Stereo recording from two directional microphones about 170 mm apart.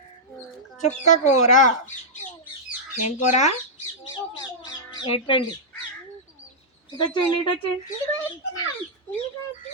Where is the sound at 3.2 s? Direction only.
45° left (ahead or behind).